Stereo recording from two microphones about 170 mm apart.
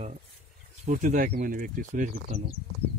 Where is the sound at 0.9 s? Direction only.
45° right (ahead or behind).